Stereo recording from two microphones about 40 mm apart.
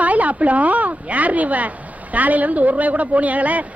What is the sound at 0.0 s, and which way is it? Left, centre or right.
Speech, right.